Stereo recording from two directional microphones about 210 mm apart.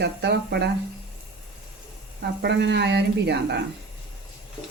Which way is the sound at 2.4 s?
55° right (ahead or behind).